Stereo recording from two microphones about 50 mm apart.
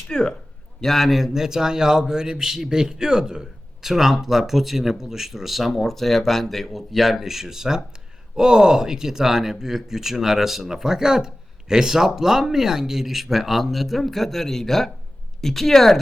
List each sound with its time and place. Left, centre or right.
0.1 s a man's voice: centre
0.8 s speech: centre